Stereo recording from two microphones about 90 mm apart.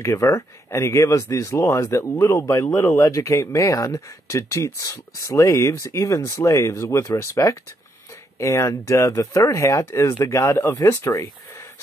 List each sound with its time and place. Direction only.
0.0 s speech: 40° left (ahead or behind)